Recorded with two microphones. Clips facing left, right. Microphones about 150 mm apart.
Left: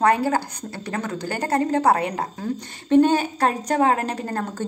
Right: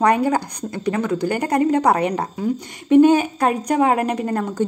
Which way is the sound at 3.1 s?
35° left (ahead or behind).